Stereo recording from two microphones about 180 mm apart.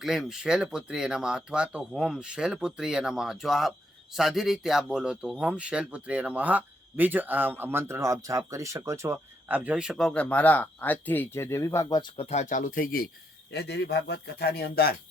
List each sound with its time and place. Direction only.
0.0 s speech: centre (ahead or behind); by 13.1 s 50° left (ahead or behind)
13.5 s speech: 65° left (ahead or behind)